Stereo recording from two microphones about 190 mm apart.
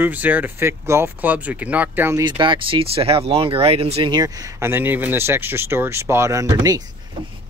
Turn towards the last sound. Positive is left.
turn(degrees=-20)  # may be behind; listen again after turning